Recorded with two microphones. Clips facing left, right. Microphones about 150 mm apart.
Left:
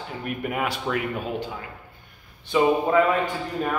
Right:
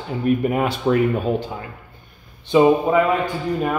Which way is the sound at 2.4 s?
25° right (ahead or behind).